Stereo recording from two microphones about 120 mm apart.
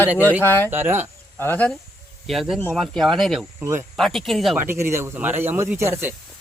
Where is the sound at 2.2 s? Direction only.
Centre (ahead or behind).